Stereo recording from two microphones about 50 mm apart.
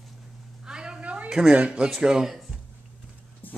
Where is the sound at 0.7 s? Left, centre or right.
Centre.